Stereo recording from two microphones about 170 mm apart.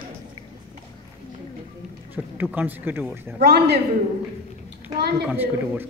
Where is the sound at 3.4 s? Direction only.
70° right (ahead or behind).